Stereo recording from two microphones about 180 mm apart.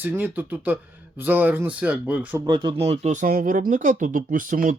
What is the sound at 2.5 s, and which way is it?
Speech, 25° right (ahead or behind).